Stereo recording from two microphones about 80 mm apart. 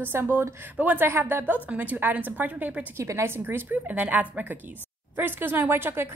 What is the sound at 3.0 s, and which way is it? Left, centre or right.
A woman's voice, right.